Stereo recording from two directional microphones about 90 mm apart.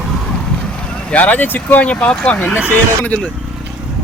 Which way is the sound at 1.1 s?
15° left (ahead or behind).